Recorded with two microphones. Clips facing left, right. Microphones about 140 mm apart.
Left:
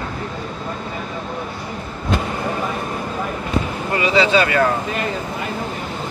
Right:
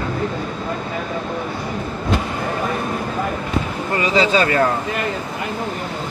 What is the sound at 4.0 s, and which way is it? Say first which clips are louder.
Speech: left 1 dB; 40° right (ahead or behind).